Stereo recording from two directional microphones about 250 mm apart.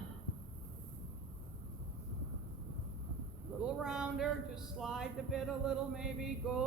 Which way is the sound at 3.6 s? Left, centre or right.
Centre.